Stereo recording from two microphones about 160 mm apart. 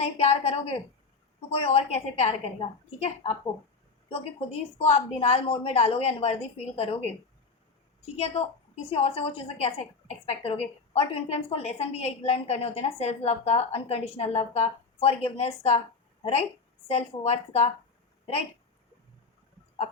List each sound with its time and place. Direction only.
0.0 s a woman's voice: 40° left (ahead or behind)
8.1 s a woman's voice: 40° left (ahead or behind)